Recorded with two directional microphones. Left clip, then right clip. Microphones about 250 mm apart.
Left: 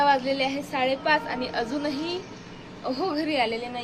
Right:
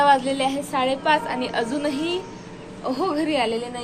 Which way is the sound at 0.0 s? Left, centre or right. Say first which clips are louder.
Right 4 dB; centre.